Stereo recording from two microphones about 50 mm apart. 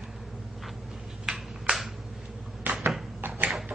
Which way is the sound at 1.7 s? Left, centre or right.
Right.